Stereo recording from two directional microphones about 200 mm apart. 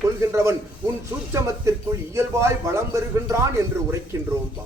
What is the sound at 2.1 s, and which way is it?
Speech, 15° right (ahead or behind).